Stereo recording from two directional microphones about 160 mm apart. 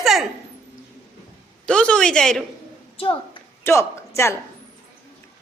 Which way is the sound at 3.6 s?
15° left (ahead or behind).